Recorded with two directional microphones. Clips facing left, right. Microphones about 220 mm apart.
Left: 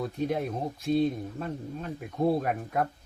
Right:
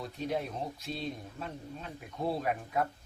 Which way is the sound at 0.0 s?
50° left (ahead or behind).